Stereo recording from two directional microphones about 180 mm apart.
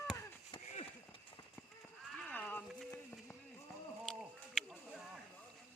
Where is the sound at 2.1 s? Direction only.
10° left (ahead or behind).